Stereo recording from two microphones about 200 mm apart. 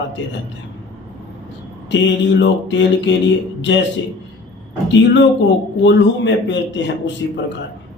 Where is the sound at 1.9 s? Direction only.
60° left (ahead or behind).